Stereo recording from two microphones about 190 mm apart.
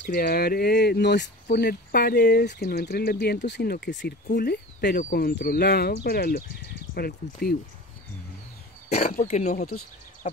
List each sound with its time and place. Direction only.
0.1 s speech: 55° left (ahead or behind)
8.9 s speech: 50° left (ahead or behind)
9.3 s speech: 40° left (ahead or behind)